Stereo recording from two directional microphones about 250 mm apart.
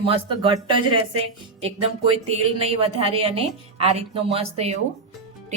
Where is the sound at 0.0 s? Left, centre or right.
Right.